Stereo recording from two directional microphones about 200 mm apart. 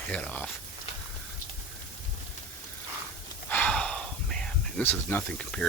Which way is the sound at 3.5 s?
5° left (ahead or behind).